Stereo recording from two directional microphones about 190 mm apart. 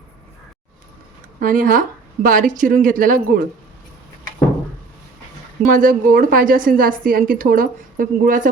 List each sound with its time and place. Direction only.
1.4 s a woman's voice: 45° right (ahead or behind)
5.6 s a woman's voice: 45° right (ahead or behind)